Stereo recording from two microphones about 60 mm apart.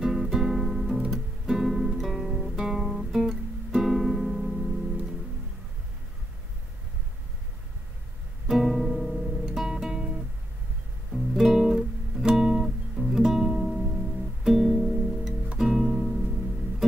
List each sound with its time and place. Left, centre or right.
0.0 s music: centre
1.1 s guitar: centre
2.5 s guitar: centre
8.5 s music: centre
11.3 s guitar: centre
12.9 s music: centre
15.5 s music: centre